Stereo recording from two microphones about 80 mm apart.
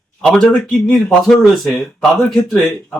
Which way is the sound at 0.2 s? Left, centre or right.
Centre.